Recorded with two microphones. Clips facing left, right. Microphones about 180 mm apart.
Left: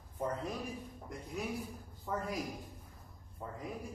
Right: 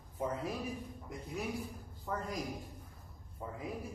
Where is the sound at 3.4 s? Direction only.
5° right (ahead or behind).